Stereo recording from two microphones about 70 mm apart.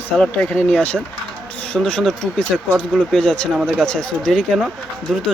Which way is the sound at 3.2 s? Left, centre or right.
Centre.